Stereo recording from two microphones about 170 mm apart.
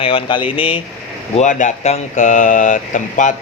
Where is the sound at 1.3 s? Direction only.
45° left (ahead or behind).